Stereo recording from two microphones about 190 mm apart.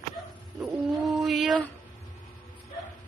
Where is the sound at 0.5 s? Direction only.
Centre (ahead or behind).